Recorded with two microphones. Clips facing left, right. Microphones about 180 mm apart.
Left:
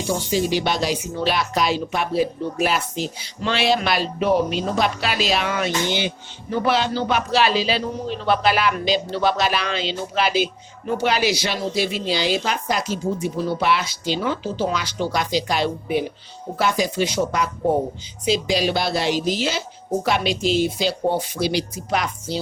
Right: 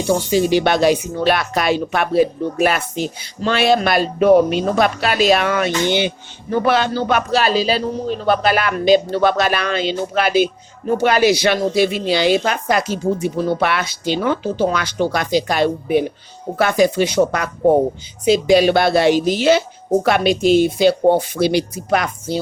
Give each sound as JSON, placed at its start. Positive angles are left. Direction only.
{"t": 0.1, "sound": "a man's voice", "side_deg": -60}